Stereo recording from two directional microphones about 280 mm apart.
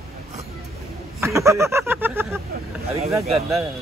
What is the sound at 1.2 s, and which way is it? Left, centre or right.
A man's voice, centre.